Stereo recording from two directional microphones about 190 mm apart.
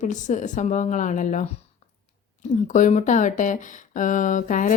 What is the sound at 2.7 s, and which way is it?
A woman's voice, 40° left (ahead or behind).